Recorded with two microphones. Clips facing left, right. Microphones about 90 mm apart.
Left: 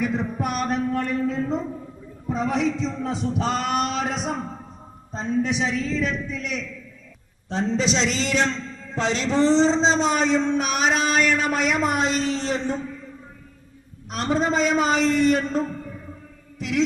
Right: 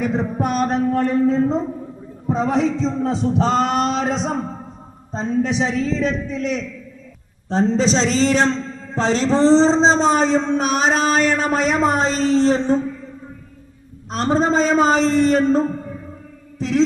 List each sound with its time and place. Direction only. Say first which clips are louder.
0.0 s a man's voice: right 4 dB; 35° right (ahead or behind)
14.1 s a man's voice: right 5 dB; 35° right (ahead or behind)
16.6 s a sound: right 5 dB; 35° right (ahead or behind)